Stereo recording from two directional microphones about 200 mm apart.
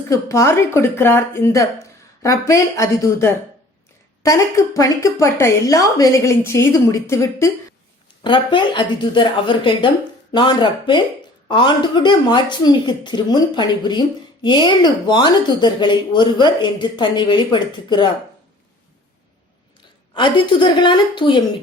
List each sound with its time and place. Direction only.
0.1 s speech: 15° left (ahead or behind)
20.1 s speech: 25° left (ahead or behind)